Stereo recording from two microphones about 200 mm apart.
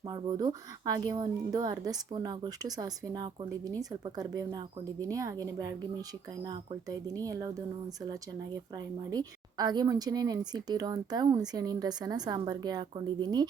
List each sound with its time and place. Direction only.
0.1 s a woman's voice: 20° right (ahead or behind)
9.0 s speech: 20° right (ahead or behind)